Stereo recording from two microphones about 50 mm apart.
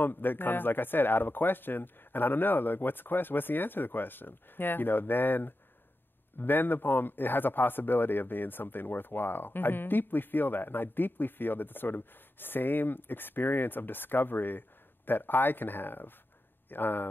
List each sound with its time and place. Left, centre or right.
0.0 s a man's voice: left